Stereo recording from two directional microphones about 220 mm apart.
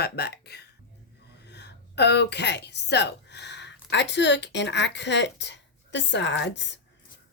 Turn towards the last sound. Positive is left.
turn(degrees=55)  # may be behind; listen again after turning